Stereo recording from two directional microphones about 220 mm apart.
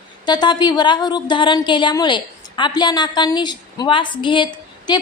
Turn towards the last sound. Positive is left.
turn(degrees=20)  # may be behind; listen again after turning